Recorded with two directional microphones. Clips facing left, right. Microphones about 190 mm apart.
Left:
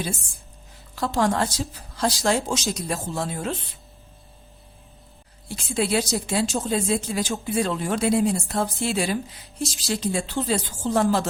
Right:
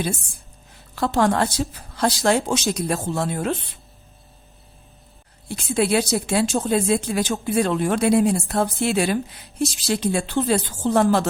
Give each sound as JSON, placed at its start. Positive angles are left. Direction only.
{"t": 0.9, "sound": "speech", "side_deg": -60}
{"t": 5.5, "sound": "speech", "side_deg": -55}